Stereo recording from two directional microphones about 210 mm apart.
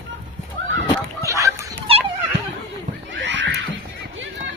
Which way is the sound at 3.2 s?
60° right (ahead or behind).